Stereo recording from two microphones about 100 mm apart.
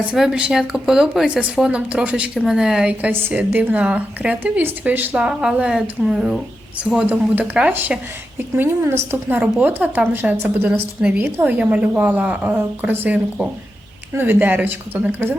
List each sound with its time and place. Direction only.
0.1 s a woman's voice: 10° right (ahead or behind)
3.1 s a woman's voice: 20° right (ahead or behind)